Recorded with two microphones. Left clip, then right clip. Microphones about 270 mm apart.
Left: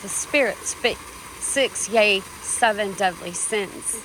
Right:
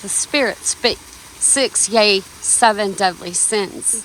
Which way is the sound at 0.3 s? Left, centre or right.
Centre.